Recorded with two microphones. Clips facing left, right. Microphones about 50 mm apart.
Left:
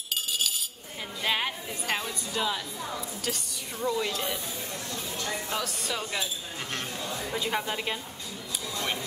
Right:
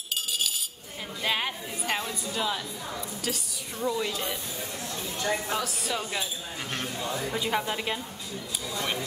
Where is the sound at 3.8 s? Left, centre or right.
Left.